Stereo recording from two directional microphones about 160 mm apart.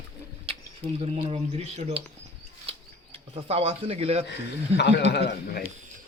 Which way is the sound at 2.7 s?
40° right (ahead or behind).